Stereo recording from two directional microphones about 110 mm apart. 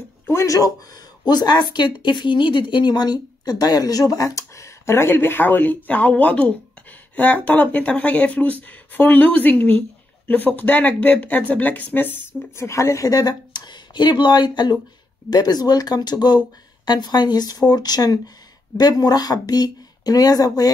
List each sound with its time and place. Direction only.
0.3 s speech: 30° left (ahead or behind)